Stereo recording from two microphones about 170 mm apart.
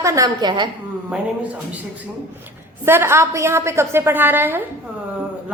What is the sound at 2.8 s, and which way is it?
A woman's voice, 15° right (ahead or behind).